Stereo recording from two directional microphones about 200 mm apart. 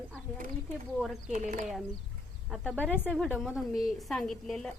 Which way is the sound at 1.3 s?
40° right (ahead or behind).